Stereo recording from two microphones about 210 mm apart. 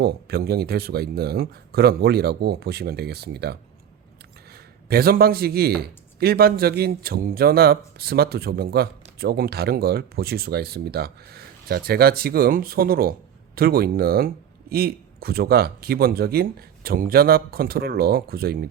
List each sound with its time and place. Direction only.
0.0 s speech: 50° right (ahead or behind)